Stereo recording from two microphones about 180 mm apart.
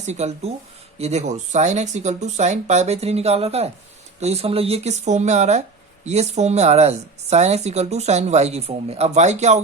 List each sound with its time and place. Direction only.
0.0 s speech: 40° right (ahead or behind)